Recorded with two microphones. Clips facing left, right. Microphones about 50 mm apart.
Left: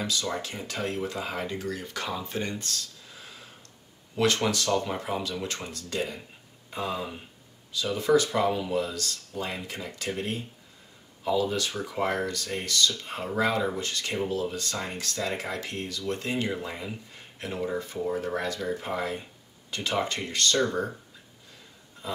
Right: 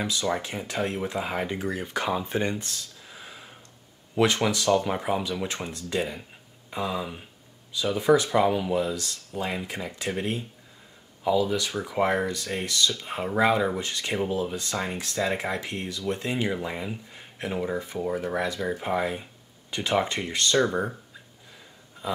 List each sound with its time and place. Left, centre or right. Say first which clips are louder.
0.0 s speech: right 3 dB; right
11.2 s speech: right 2 dB; centre